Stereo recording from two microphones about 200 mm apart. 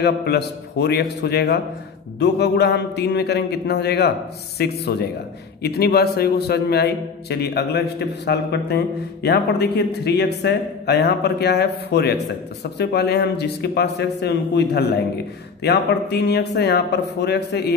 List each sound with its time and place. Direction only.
0.0 s a man's voice: 55° left (ahead or behind)